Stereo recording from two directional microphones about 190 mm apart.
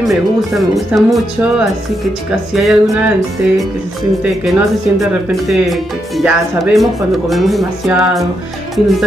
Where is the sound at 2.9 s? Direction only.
15° right (ahead or behind).